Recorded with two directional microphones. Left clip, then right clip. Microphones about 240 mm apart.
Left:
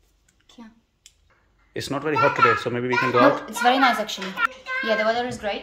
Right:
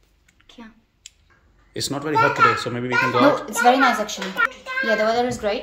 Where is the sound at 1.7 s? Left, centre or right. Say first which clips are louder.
Right 1 dB; centre.